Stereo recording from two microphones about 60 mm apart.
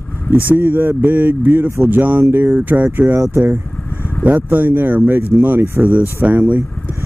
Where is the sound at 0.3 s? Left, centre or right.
Right.